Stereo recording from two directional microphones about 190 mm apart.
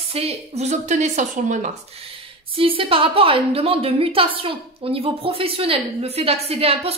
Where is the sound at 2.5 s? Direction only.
30° right (ahead or behind).